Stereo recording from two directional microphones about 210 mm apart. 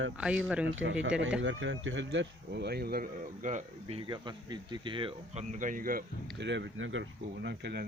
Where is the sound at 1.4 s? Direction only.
60° right (ahead or behind); by 6.1 s 45° right (ahead or behind).